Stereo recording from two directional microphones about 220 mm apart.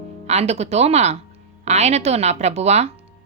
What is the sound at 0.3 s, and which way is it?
Speech, 30° right (ahead or behind).